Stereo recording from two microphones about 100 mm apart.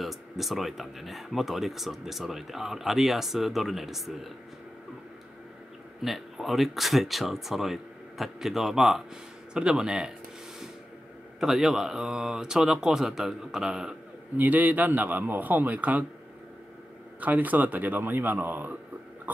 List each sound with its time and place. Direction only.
0.0 s speech: centre (ahead or behind)
6.0 s a man's voice: centre (ahead or behind)
11.3 s speech: 5° right (ahead or behind)
14.3 s a man's voice: 15° right (ahead or behind)
17.2 s a man's voice: 15° right (ahead or behind)